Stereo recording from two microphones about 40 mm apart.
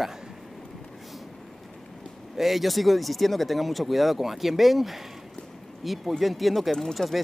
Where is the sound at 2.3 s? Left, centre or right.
Centre.